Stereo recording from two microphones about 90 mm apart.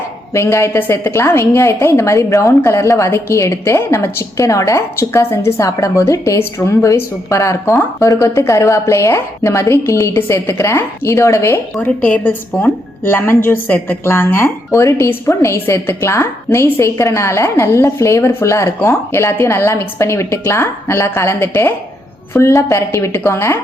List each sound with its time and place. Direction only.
0.3 s a woman's voice: 30° left (ahead or behind)
12.0 s a woman's voice: 20° left (ahead or behind)